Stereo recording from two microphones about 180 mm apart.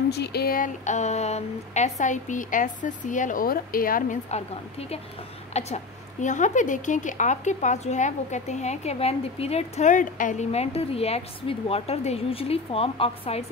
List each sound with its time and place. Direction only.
0.1 s a woman's voice: 65° left (ahead or behind); by 13.5 s 35° left (ahead or behind)